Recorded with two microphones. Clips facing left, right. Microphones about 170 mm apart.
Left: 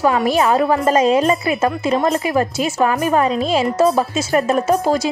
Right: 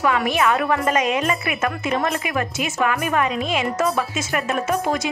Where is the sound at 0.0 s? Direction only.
30° left (ahead or behind).